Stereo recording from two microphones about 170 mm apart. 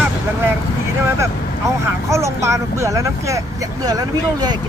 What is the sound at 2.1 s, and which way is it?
Speech, 15° right (ahead or behind).